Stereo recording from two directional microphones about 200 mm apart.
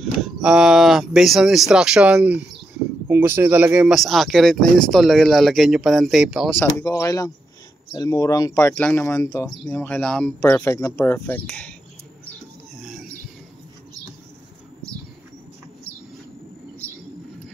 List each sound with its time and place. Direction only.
0.0 s speech: centre (ahead or behind)
6.6 s speech: 15° left (ahead or behind)